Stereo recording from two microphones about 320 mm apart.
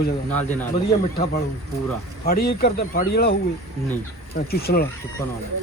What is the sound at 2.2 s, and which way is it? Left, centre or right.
Speech, left.